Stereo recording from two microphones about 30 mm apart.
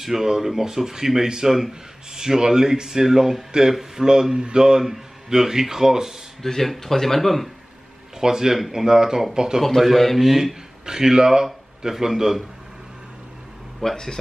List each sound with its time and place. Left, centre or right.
0.0 s speech: centre
6.4 s speech: centre
8.2 s speech: centre
9.8 s speech: centre
10.9 s speech: centre
13.8 s speech: centre